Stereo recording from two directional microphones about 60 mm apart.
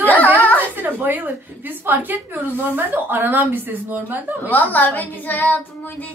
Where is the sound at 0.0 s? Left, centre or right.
Left.